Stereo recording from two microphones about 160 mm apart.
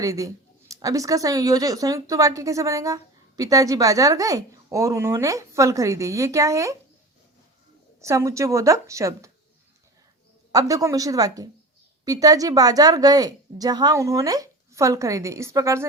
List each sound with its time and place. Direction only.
0.0 s speech: 20° right (ahead or behind)
8.0 s speech: 20° right (ahead or behind)
10.5 s speech: 20° right (ahead or behind)